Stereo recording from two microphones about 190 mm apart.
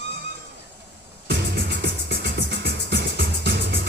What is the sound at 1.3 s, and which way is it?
Music, 60° right (ahead or behind).